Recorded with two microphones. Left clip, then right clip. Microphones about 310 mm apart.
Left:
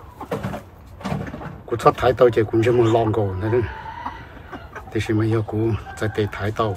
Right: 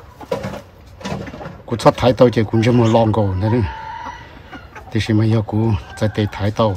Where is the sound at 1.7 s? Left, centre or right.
Centre.